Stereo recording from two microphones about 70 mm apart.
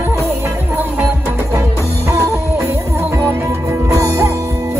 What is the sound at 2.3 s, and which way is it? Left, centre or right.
Music, right.